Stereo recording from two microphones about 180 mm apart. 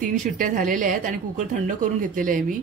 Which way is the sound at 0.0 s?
50° right (ahead or behind).